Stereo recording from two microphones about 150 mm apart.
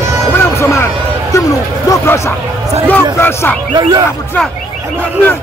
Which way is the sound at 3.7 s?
30° right (ahead or behind).